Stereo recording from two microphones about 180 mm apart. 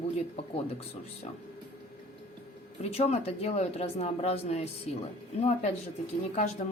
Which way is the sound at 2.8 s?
35° left (ahead or behind).